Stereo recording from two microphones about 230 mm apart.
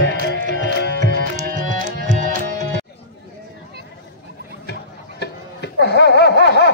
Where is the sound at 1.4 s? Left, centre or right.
Right.